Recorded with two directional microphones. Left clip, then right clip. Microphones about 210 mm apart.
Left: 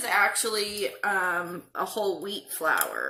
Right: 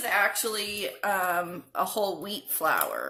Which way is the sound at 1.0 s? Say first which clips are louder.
Even; 40° right (ahead or behind).